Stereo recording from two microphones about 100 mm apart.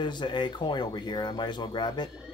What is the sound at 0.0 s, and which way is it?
Speech, 50° left (ahead or behind).